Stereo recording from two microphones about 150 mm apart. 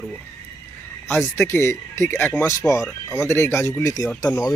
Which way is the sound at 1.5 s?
15° left (ahead or behind).